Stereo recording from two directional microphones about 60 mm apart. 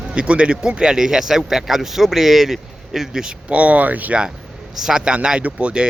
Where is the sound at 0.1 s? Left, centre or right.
Centre.